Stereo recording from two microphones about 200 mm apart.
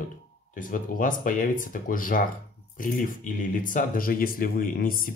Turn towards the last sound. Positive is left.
turn(degrees=45)  # may be behind; listen again after turning